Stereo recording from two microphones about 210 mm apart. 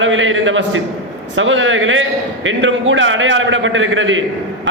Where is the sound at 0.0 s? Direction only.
65° right (ahead or behind).